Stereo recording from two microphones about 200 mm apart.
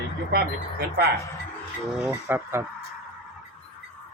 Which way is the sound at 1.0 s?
50° right (ahead or behind).